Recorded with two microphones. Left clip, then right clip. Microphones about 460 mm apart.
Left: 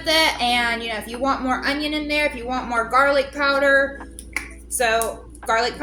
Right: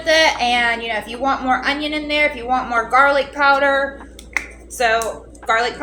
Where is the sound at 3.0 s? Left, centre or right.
Left.